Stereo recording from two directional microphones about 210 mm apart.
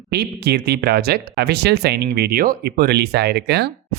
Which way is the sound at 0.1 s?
50° right (ahead or behind).